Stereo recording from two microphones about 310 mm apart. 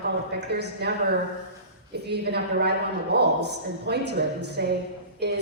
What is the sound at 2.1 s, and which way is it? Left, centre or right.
A woman's voice, right.